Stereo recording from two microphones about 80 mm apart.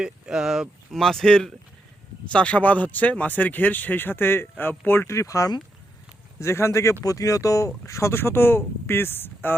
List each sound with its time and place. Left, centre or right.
0.0 s speech: centre; by 9.6 s left